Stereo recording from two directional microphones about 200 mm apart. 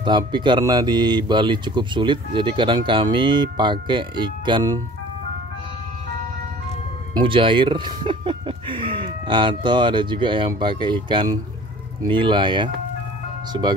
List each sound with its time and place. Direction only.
0.0 s speech: 25° right (ahead or behind)
7.2 s speech: 25° right (ahead or behind)